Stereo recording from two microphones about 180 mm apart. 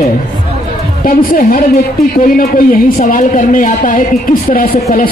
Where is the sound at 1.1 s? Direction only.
50° left (ahead or behind).